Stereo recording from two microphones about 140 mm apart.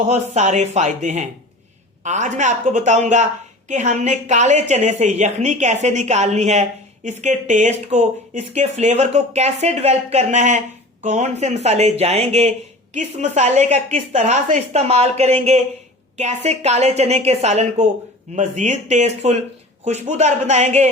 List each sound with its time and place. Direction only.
0.1 s a woman's voice: 55° right (ahead or behind)